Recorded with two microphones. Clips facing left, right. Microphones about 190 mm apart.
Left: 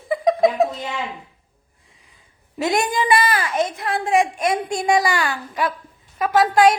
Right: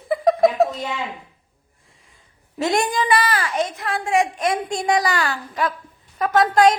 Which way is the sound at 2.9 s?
10° left (ahead or behind).